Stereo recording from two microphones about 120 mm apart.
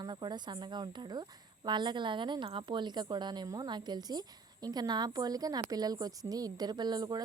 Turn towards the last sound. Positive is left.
turn(degrees=-35)  # may be behind; listen again after turning